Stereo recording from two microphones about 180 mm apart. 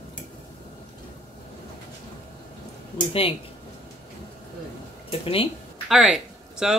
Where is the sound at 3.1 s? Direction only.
30° left (ahead or behind).